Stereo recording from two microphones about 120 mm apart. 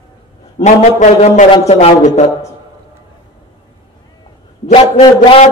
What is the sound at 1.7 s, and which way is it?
Speech, 60° left (ahead or behind).